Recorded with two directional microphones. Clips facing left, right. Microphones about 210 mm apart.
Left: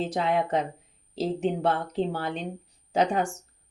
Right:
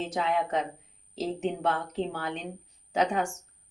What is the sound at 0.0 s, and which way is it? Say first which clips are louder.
Speech: left 3 dB; 35° left (ahead or behind).